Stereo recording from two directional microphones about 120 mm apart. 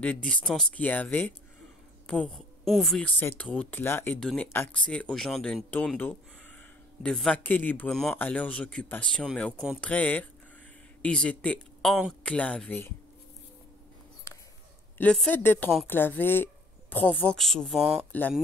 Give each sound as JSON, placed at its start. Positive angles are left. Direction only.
{"t": 0.0, "sound": "a woman's voice", "side_deg": 10}
{"t": 3.1, "sound": "speech", "side_deg": 15}
{"t": 4.2, "sound": "speech", "side_deg": 5}
{"t": 7.0, "sound": "speech", "side_deg": 5}
{"t": 7.9, "sound": "speech", "side_deg": 0}
{"t": 8.2, "sound": "speech", "side_deg": 15}
{"t": 15.0, "sound": "speech", "side_deg": 10}
{"t": 17.4, "sound": "speech", "side_deg": 5}